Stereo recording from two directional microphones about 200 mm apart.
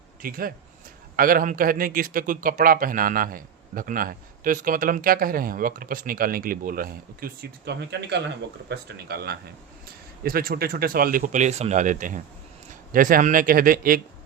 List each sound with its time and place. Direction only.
0.2 s a man's voice: 45° right (ahead or behind)